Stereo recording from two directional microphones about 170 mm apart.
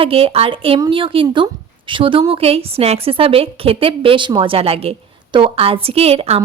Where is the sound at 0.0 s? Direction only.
35° right (ahead or behind).